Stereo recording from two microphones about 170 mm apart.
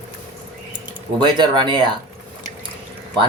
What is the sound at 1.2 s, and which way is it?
Speech, 25° right (ahead or behind).